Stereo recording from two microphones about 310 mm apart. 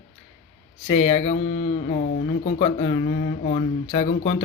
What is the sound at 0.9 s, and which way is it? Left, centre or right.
Speech, left.